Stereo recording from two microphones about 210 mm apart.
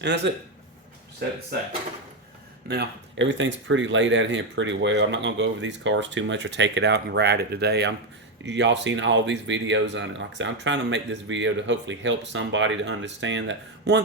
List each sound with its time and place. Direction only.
0.2 s speech: 55° right (ahead or behind)
2.6 s speech: 55° right (ahead or behind)